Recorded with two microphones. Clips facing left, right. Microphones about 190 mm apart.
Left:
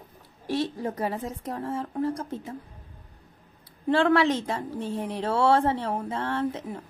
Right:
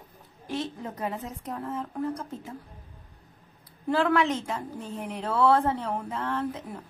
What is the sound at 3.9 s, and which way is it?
Speech, 30° left (ahead or behind).